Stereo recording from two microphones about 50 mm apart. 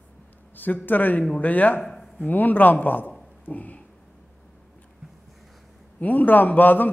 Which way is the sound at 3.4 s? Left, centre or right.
Left.